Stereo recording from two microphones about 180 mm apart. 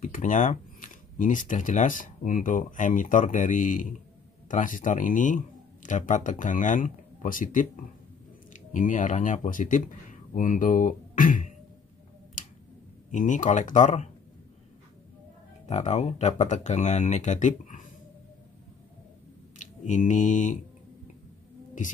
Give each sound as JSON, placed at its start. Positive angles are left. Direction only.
{"t": 0.0, "sound": "speech", "side_deg": 45}
{"t": 13.1, "sound": "speech", "side_deg": 45}
{"t": 15.6, "sound": "speech", "side_deg": 40}
{"t": 19.6, "sound": "speech", "side_deg": 40}